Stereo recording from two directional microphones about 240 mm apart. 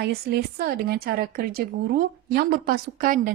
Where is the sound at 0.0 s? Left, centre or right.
Right.